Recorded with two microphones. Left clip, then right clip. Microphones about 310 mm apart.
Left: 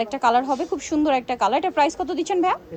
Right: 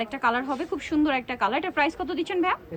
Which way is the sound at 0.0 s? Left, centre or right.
Centre.